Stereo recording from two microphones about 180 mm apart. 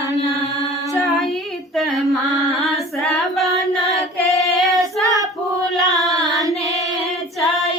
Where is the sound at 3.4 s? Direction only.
20° right (ahead or behind).